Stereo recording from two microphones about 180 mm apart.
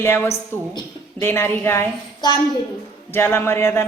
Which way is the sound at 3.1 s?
15° left (ahead or behind).